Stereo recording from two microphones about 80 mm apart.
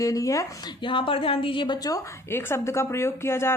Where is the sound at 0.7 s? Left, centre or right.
Left.